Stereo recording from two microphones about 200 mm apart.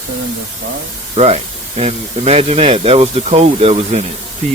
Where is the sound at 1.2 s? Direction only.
30° right (ahead or behind).